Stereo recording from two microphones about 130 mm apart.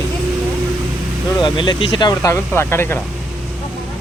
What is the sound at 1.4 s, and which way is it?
Speech, 40° left (ahead or behind).